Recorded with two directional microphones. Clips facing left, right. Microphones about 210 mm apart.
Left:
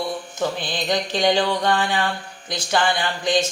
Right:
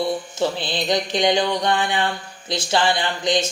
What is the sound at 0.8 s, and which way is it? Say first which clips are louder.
Speech: even; 20° right (ahead or behind).